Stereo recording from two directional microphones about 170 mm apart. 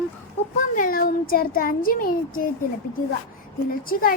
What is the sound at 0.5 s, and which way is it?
A child's voice, 50° left (ahead or behind).